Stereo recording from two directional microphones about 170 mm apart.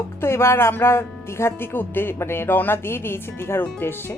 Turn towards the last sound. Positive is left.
turn(degrees=10)  # may be behind; listen again after turning